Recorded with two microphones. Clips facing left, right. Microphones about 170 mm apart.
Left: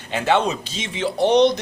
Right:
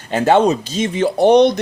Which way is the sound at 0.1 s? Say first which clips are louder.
Right 7 dB; 40° right (ahead or behind).